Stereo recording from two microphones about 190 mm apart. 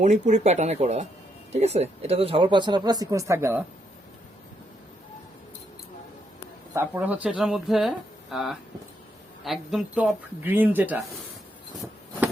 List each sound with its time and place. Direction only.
0.0 s speech: 40° right (ahead or behind); by 3.6 s 15° right (ahead or behind)
6.7 s speech: 10° right (ahead or behind)